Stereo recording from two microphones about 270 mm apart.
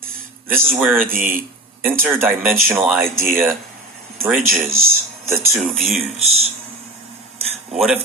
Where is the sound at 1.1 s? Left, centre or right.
Right.